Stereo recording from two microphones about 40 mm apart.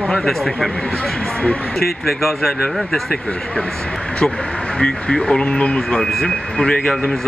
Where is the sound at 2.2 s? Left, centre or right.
Centre.